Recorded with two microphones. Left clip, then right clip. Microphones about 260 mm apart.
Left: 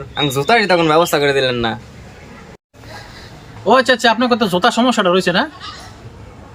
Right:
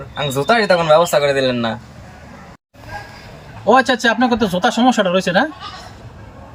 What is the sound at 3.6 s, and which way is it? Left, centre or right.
Speech, centre.